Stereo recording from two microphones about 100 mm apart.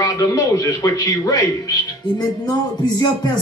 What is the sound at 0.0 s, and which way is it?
Speech, 35° left (ahead or behind).